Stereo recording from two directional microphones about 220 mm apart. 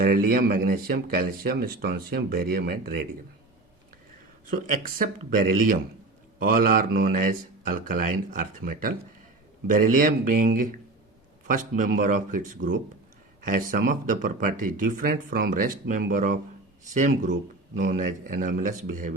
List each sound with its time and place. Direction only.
0.0 s speech: 40° right (ahead or behind)
4.5 s speech: 40° right (ahead or behind)